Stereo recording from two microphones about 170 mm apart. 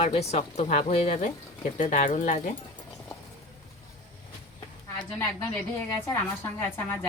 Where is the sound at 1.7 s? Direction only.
50° left (ahead or behind).